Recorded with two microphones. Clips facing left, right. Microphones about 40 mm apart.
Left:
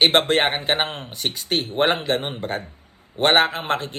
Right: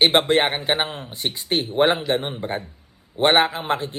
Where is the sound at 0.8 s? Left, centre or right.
Left.